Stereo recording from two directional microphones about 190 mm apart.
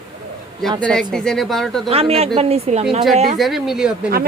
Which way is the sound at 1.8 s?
30° right (ahead or behind).